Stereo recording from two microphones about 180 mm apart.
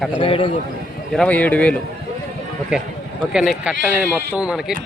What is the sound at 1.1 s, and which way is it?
Speech, 5° left (ahead or behind).